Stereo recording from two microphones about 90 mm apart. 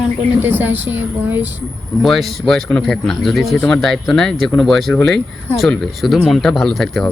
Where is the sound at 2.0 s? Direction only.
Centre (ahead or behind).